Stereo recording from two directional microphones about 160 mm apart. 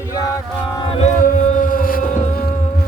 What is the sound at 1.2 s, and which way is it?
Music, 50° left (ahead or behind).